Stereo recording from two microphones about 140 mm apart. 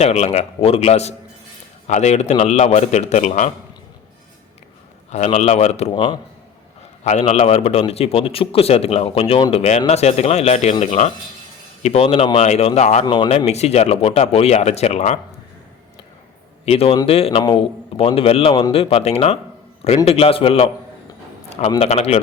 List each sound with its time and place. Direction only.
0.0 s a man's voice: 50° left (ahead or behind)
5.1 s a man's voice: 55° left (ahead or behind)
5.9 s a man's voice: 35° left (ahead or behind)
7.0 s a man's voice: 55° left (ahead or behind)
13.1 s a man's voice: 40° left (ahead or behind)
16.6 s a man's voice: 45° left (ahead or behind)
21.8 s a man's voice: 50° left (ahead or behind)